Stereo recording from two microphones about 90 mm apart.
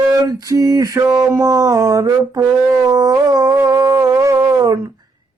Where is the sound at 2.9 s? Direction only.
45° right (ahead or behind).